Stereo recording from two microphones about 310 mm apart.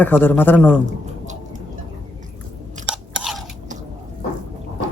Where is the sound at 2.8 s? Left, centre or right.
Centre.